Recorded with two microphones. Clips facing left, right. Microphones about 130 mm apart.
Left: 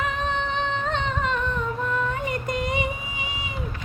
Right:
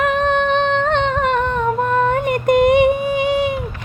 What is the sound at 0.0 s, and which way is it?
Humming, 65° right (ahead or behind).